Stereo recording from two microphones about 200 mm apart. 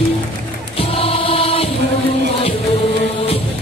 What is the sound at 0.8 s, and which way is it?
Choir, 30° left (ahead or behind).